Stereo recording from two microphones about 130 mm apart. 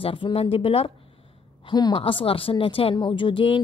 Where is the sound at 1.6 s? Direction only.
35° left (ahead or behind).